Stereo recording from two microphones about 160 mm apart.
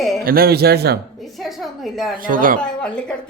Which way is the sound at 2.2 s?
60° right (ahead or behind).